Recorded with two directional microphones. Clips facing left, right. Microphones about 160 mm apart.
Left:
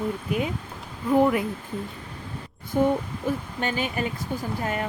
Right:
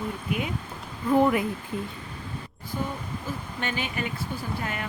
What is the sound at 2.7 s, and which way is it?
Speech, 55° left (ahead or behind).